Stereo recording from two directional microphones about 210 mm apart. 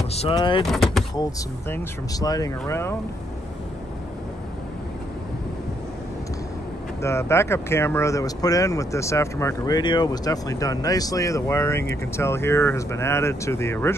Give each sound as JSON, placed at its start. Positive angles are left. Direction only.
{"t": 0.1, "sound": "speech", "side_deg": 25}
{"t": 0.7, "sound": "speech", "side_deg": 0}
{"t": 1.7, "sound": "speech", "side_deg": 15}
{"t": 7.0, "sound": "speech", "side_deg": 15}